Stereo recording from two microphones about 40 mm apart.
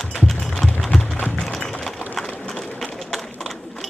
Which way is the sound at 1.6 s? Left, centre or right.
Centre.